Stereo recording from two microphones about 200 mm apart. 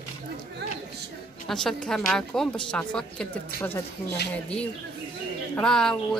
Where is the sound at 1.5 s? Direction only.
Centre (ahead or behind).